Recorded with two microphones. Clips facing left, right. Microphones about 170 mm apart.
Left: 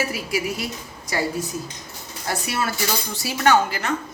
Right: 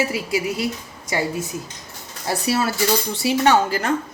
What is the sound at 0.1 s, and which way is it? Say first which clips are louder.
Speech: right 3 dB; 25° right (ahead or behind).